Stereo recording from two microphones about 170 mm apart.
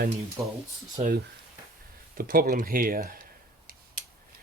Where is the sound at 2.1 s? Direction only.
60° right (ahead or behind).